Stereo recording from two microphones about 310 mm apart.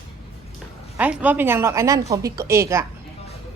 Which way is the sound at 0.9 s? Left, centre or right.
Centre.